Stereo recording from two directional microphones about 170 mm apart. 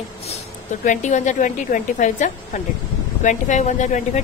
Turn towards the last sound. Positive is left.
turn(degrees=45)  # may be behind; listen again after turning